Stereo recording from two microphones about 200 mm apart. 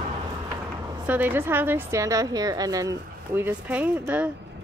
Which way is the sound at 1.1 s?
10° right (ahead or behind).